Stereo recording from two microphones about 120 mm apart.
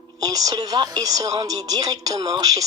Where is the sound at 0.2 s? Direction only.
30° right (ahead or behind).